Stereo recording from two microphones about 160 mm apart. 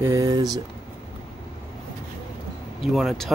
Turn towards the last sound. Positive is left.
turn(degrees=0)  # may be behind; listen again after turning